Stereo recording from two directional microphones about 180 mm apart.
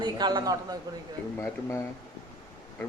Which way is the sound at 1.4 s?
15° left (ahead or behind).